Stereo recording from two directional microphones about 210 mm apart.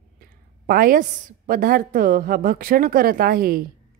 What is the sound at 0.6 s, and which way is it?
A woman's voice, 45° right (ahead or behind).